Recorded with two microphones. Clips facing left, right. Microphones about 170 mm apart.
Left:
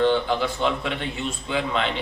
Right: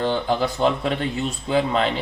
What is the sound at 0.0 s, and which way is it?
Speech, 40° right (ahead or behind).